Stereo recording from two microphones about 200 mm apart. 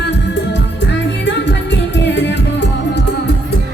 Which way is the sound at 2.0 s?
60° left (ahead or behind).